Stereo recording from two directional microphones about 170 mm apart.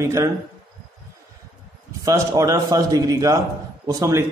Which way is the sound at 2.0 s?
20° right (ahead or behind).